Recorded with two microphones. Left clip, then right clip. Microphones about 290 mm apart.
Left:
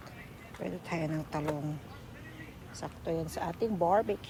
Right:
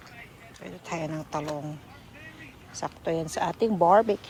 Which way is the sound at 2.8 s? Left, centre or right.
Right.